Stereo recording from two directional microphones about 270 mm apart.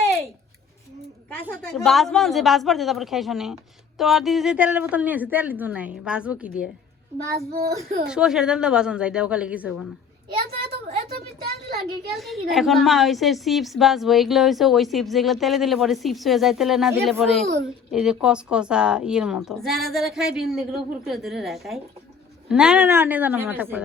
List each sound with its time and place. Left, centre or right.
1.5 s a woman's voice: centre
7.3 s a child's voice: right
8.0 s a woman's voice: centre
12.1 s a woman's voice: centre